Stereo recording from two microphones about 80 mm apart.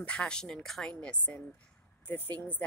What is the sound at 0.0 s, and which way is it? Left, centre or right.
Speech, centre.